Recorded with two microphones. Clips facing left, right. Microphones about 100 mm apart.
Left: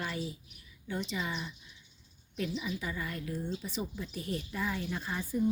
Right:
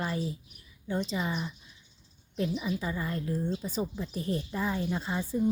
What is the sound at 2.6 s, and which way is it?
A woman's voice, 30° right (ahead or behind).